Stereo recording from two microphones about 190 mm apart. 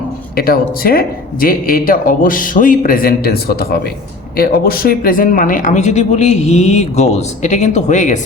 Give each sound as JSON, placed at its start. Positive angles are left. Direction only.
{"t": 0.3, "sound": "speech", "side_deg": 50}